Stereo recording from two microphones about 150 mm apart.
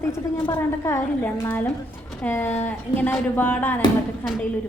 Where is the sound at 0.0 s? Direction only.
20° left (ahead or behind).